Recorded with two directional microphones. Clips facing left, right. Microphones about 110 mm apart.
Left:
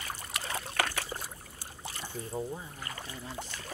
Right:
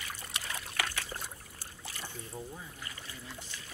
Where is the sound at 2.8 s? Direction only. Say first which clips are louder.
Left 5 dB; 50° left (ahead or behind).